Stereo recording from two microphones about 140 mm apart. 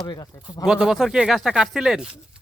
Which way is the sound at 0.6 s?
5° right (ahead or behind).